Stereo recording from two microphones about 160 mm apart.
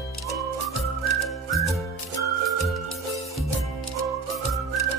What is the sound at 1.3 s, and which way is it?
Music, centre (ahead or behind).